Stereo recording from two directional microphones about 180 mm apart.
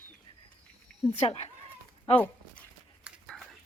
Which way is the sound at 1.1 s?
35° left (ahead or behind).